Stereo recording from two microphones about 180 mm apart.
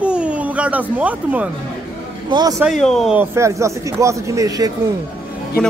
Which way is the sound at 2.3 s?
25° right (ahead or behind).